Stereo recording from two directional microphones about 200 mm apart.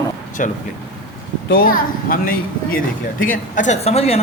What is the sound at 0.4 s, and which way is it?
Speech, 40° left (ahead or behind).